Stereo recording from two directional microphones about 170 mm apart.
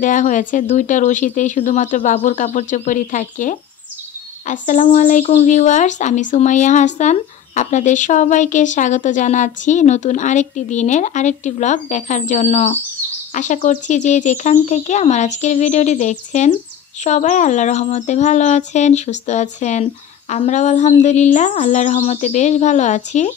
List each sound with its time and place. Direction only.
0.0 s a woman's voice: 50° left (ahead or behind)